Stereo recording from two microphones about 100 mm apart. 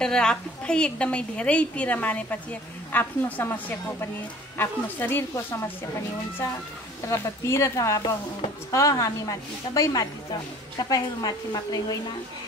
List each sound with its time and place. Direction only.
0.0 s a woman's voice: 10° left (ahead or behind)
7.1 s a woman's voice: 30° left (ahead or behind)